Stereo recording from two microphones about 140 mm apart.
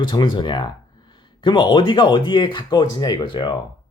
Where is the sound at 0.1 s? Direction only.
30° left (ahead or behind).